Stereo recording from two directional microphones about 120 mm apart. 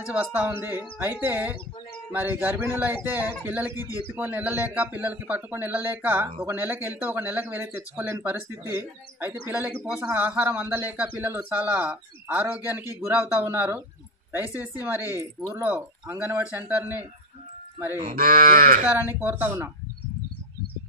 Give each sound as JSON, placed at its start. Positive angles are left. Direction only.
{"t": 0.0, "sound": "speech", "side_deg": -15}
{"t": 18.9, "sound": "speech", "side_deg": -15}